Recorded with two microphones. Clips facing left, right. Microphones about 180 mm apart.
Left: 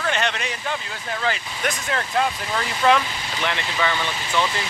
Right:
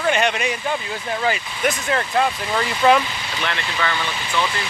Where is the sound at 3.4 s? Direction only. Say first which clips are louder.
Left 1 dB; 15° left (ahead or behind).